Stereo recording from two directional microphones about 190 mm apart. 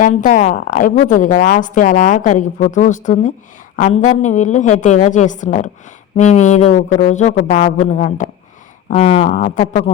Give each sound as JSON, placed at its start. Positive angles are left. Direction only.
{"t": 0.0, "sound": "a woman's voice", "side_deg": 40}